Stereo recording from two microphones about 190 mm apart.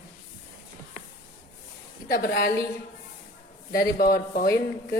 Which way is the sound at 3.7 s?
50° left (ahead or behind).